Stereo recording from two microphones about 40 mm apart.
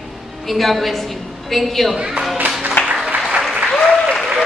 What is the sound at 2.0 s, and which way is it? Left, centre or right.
Speech, right.